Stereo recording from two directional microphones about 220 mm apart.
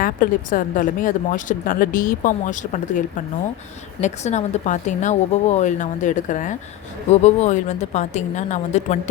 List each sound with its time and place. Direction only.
0.0 s speech: 40° left (ahead or behind)
4.0 s speech: 30° left (ahead or behind)